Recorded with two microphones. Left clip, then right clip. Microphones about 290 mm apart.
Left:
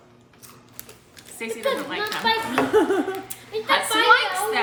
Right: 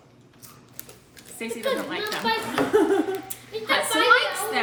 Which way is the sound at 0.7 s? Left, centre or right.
Centre.